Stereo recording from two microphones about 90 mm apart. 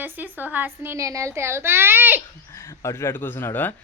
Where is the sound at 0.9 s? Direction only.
35° right (ahead or behind).